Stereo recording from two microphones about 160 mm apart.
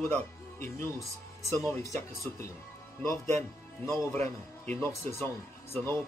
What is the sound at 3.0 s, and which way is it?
Speech, 15° left (ahead or behind).